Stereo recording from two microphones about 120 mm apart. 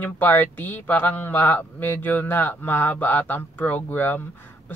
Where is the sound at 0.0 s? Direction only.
15° left (ahead or behind).